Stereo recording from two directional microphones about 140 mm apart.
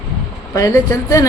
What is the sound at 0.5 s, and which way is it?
Speech, 25° left (ahead or behind).